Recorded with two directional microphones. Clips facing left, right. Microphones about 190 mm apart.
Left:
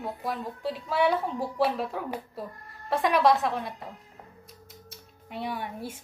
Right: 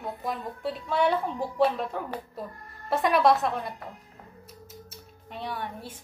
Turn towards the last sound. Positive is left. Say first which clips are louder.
# left 1 dB
turn(degrees=10)  # may be behind; listen again after turning